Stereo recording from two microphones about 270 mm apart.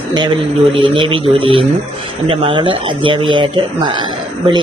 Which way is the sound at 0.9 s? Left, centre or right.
Centre.